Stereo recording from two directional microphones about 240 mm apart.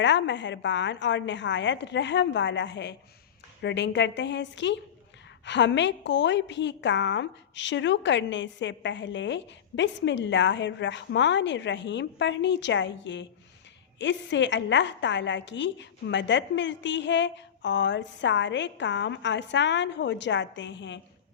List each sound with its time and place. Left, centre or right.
0.0 s a woman's voice: left